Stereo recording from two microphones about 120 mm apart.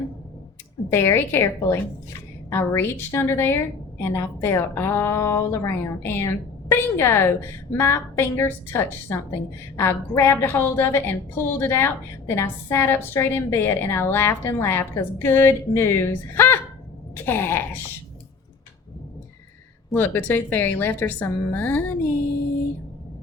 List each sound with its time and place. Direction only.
0.9 s a woman's voice: 20° left (ahead or behind)
19.9 s a woman's voice: 15° left (ahead or behind)